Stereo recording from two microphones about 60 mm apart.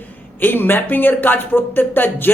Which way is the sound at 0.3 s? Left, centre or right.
Left.